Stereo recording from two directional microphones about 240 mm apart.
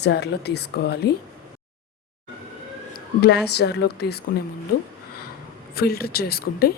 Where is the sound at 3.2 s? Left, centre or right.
Left.